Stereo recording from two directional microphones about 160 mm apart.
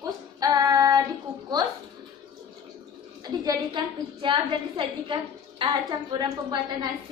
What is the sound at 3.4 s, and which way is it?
A woman's voice, 30° right (ahead or behind).